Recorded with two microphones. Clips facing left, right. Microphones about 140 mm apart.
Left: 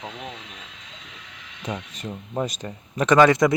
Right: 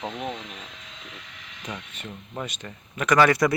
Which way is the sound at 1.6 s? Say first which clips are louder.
Left 6 dB; 35° left (ahead or behind).